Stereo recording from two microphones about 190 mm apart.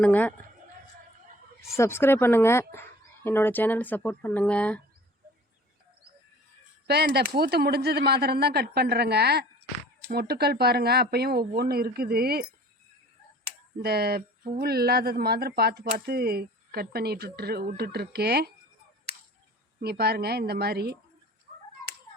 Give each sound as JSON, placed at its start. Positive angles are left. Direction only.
{"t": 0.0, "sound": "speech", "side_deg": 10}
{"t": 1.7, "sound": "speech", "side_deg": 15}
{"t": 6.8, "sound": "speech", "side_deg": -60}
{"t": 13.7, "sound": "speech", "side_deg": -55}
{"t": 19.8, "sound": "speech", "side_deg": -55}